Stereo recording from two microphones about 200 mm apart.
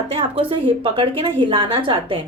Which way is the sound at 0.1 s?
25° right (ahead or behind).